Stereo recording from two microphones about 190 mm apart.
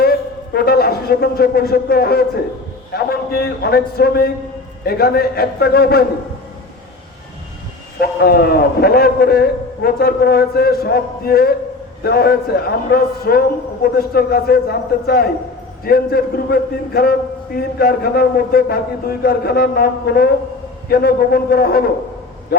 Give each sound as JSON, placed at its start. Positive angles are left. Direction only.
{"t": 0.0, "sound": "a sound", "side_deg": 55}
{"t": 2.9, "sound": "a man's voice", "side_deg": 55}
{"t": 7.9, "sound": "a man's voice", "side_deg": 55}